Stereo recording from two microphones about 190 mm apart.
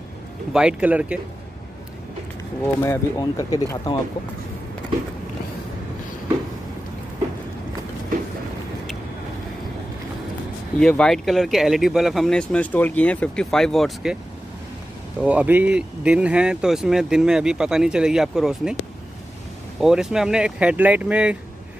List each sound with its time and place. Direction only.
0.5 s speech: 5° right (ahead or behind)
2.8 s speech: 15° left (ahead or behind)
10.8 s speech: 5° left (ahead or behind)
15.2 s speech: 10° right (ahead or behind)
19.8 s speech: centre (ahead or behind)